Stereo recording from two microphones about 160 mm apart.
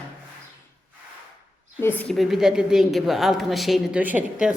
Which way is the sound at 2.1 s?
Centre (ahead or behind).